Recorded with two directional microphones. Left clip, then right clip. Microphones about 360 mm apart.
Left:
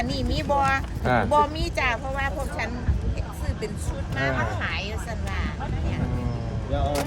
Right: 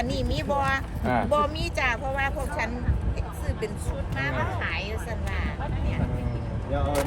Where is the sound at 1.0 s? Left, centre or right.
Left.